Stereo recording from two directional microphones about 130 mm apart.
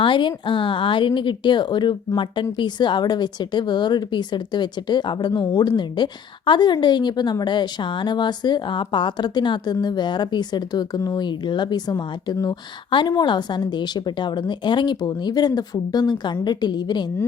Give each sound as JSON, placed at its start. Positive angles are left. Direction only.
{"t": 0.0, "sound": "speech", "side_deg": 40}